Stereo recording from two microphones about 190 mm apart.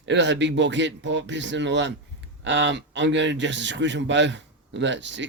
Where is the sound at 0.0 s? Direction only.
70° right (ahead or behind).